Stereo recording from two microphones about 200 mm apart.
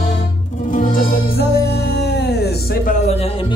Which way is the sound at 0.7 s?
45° left (ahead or behind).